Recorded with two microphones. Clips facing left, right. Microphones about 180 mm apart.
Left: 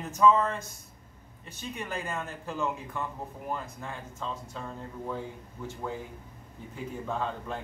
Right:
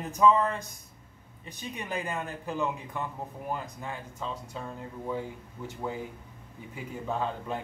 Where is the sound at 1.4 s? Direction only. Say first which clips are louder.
Even; 15° right (ahead or behind).